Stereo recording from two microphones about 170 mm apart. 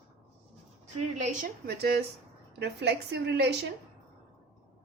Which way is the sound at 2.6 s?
85° right.